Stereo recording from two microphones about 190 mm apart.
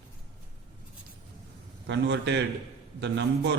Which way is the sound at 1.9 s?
65° right (ahead or behind).